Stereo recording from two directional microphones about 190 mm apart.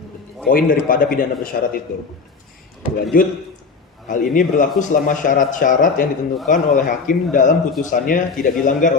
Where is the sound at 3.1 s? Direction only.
50° left (ahead or behind).